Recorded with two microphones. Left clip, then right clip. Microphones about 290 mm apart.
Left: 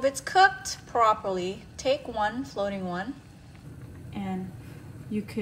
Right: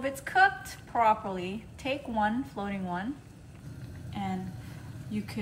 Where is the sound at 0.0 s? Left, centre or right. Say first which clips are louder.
Left 4 dB; left.